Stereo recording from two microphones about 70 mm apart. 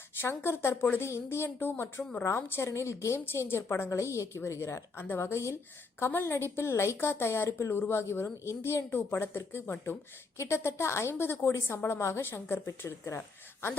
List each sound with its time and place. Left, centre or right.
0.2 s a woman's voice: left
2.2 s a woman's voice: left